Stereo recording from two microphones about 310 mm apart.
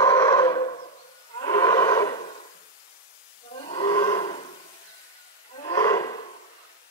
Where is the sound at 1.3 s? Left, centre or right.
Centre.